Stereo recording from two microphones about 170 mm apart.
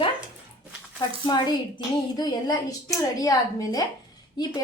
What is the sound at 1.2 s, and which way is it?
A woman's voice, 25° left (ahead or behind).